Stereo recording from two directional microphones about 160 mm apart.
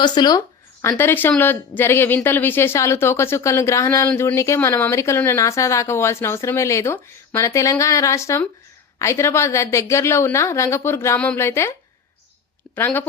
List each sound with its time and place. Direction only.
0.0 s speech: 25° left (ahead or behind)
12.7 s speech: 10° left (ahead or behind)